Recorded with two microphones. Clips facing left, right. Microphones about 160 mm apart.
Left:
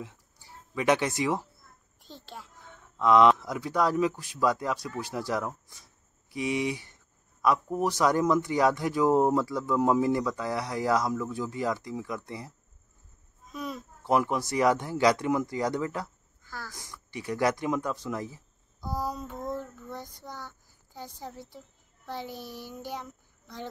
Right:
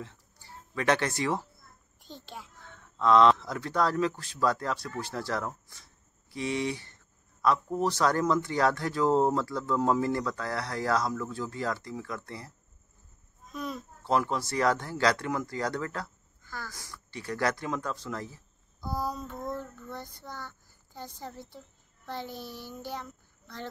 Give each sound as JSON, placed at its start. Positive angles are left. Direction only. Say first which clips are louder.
{"t": 0.0, "sound": "speech", "louder": "left 1 dB", "side_deg": 10}
{"t": 2.0, "sound": "a child's voice", "louder": "right 1 dB", "side_deg": 0}
{"t": 2.6, "sound": "speech", "louder": "left 1 dB", "side_deg": 10}
{"t": 16.4, "sound": "a sound", "louder": "even", "side_deg": 5}
{"t": 16.7, "sound": "a woman's voice", "louder": "left 3 dB", "side_deg": 15}